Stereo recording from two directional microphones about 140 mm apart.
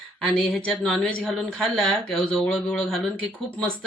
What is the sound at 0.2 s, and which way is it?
Speech, 5° left (ahead or behind).